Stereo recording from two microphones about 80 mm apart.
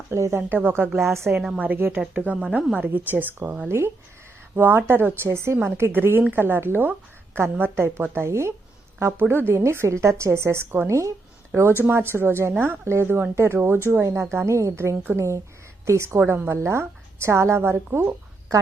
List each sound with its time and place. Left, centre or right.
0.1 s a woman's voice: right
3.7 s a woman's voice: right
11.8 s a woman's voice: right